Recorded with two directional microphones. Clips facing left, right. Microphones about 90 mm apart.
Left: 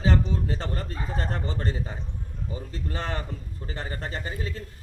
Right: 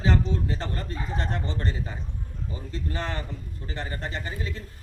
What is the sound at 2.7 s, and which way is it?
Speech, 35° left (ahead or behind).